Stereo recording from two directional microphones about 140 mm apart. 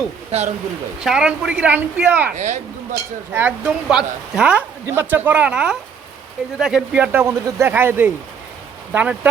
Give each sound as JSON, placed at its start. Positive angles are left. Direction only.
{"t": 0.3, "sound": "speech", "side_deg": -50}
{"t": 1.0, "sound": "speech", "side_deg": -5}
{"t": 2.3, "sound": "speech", "side_deg": -55}
{"t": 3.3, "sound": "speech", "side_deg": -10}